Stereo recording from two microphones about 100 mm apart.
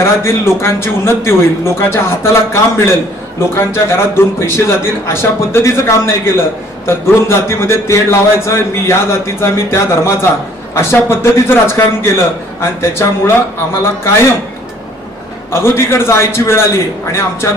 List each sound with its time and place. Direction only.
0.0 s a man's voice: 25° left (ahead or behind)
15.6 s a man's voice: 25° left (ahead or behind)